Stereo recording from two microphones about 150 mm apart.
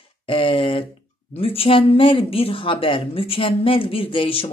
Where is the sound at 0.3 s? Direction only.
35° left (ahead or behind).